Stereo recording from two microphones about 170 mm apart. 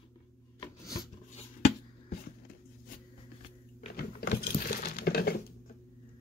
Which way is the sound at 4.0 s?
65° left (ahead or behind).